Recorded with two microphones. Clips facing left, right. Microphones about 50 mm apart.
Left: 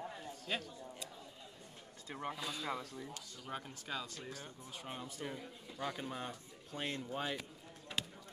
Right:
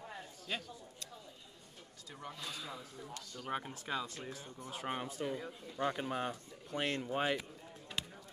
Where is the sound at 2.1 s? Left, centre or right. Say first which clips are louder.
Left 5 dB; left.